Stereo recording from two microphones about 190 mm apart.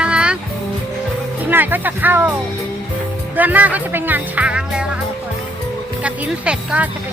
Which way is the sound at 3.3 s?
10° right (ahead or behind).